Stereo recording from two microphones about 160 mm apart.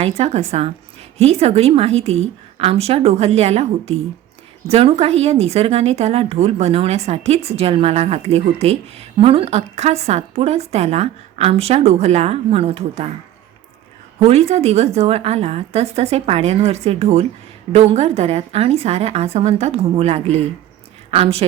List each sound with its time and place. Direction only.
0.2 s a woman's voice: 40° right (ahead or behind)
14.2 s a woman's voice: 40° right (ahead or behind)